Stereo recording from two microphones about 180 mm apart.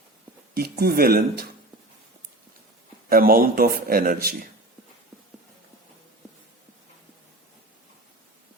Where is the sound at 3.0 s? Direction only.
55° right (ahead or behind).